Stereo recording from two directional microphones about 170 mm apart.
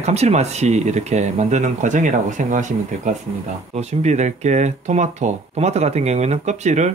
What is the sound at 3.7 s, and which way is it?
Speech, 40° right (ahead or behind).